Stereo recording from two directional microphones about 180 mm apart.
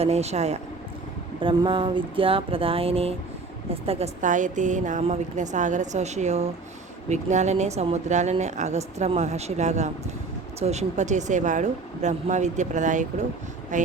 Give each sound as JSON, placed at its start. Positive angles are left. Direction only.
{"t": 0.0, "sound": "speech", "side_deg": -35}